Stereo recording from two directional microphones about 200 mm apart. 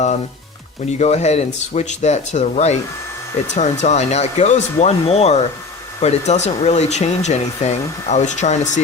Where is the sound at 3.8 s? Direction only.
35° left (ahead or behind).